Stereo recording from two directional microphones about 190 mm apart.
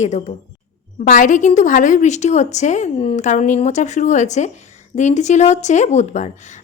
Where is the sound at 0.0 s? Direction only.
40° left (ahead or behind).